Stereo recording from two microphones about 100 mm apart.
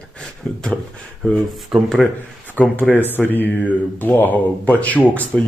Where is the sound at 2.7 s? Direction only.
20° left (ahead or behind).